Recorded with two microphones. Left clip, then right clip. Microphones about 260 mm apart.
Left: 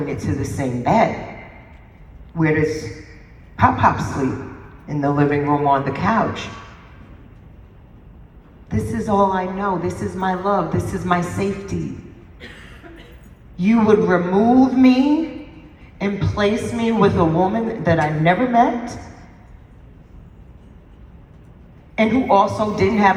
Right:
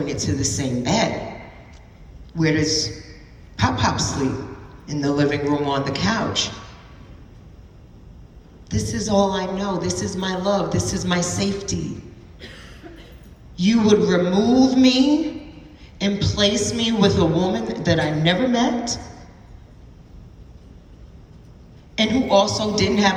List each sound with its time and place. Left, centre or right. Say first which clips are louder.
0.0 s a woman's voice: right 1 dB; centre
2.4 s a woman's voice: left 1 dB; centre
8.7 s a woman's voice: left 2 dB; centre
9.0 s a man's voice: left 2 dB; left
9.3 s a woman's voice: left 3 dB; centre
13.6 s a woman's voice: left 2 dB; centre
21.9 s a woman's voice: left 2 dB; centre